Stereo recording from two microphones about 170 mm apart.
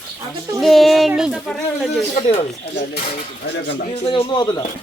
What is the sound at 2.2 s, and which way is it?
Speech, 30° left (ahead or behind).